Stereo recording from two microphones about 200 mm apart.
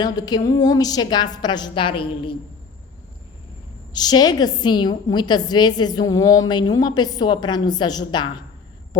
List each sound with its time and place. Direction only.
0.0 s a woman's voice: 20° left (ahead or behind)
3.9 s a woman's voice: 20° left (ahead or behind)